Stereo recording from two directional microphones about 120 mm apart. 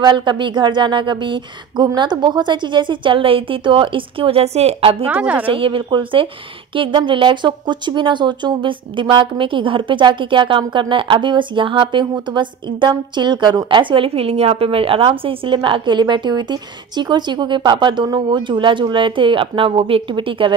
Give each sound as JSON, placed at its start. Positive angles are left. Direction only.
{"t": 0.0, "sound": "a woman's voice", "side_deg": -40}
{"t": 5.0, "sound": "a woman's voice", "side_deg": -15}
{"t": 5.5, "sound": "a woman's voice", "side_deg": -45}